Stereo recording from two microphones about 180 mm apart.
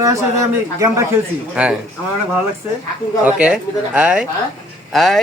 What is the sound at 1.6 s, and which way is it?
Speech, 5° right (ahead or behind).